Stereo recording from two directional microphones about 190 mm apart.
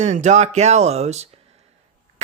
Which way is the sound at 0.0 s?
40° right (ahead or behind).